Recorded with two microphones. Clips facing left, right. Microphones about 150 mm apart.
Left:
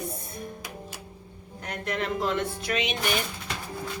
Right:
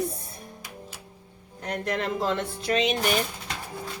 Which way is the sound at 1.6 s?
35° right (ahead or behind).